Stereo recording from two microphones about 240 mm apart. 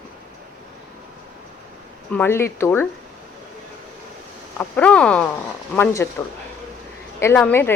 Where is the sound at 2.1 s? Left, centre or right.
Centre.